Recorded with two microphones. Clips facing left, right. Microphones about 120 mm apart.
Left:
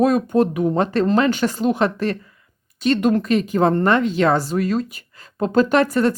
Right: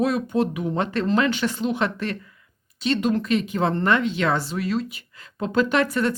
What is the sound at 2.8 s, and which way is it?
Speech, 50° left (ahead or behind).